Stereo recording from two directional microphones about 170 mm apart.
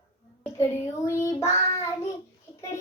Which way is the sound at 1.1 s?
15° left (ahead or behind).